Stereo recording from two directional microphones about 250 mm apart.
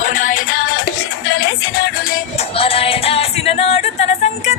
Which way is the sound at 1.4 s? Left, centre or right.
Left.